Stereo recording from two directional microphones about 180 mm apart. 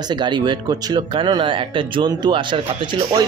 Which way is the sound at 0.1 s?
25° right (ahead or behind).